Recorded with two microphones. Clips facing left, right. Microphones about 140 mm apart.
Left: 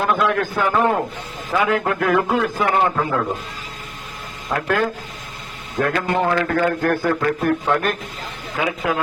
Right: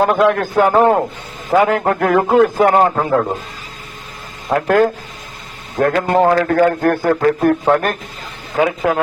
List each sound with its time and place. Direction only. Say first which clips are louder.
0.0 s a man's voice: right 6 dB; 40° right (ahead or behind)
4.4 s a man's voice: right 7 dB; 45° right (ahead or behind)